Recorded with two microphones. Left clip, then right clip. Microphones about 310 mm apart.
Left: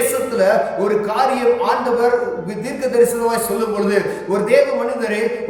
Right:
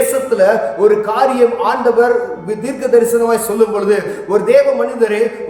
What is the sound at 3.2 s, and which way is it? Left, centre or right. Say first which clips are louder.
A man's voice: right 5 dB; centre.